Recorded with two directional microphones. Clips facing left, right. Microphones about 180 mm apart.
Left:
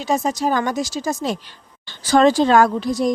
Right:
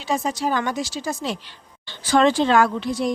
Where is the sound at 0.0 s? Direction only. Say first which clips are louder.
Left 3 dB; 40° left (ahead or behind).